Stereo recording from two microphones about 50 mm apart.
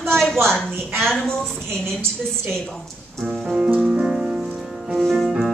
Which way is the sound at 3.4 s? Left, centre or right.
Right.